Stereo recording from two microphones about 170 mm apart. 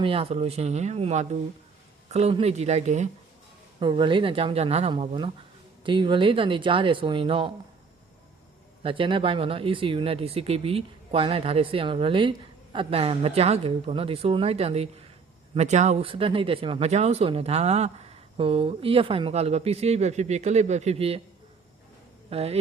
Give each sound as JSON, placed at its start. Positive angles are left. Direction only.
{"t": 0.0, "sound": "speech", "side_deg": -35}
{"t": 3.8, "sound": "speech", "side_deg": -30}
{"t": 8.8, "sound": "speech", "side_deg": -30}
{"t": 22.3, "sound": "speech", "side_deg": -35}